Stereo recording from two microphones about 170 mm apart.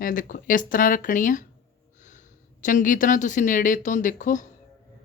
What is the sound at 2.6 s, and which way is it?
Speech, 50° left (ahead or behind).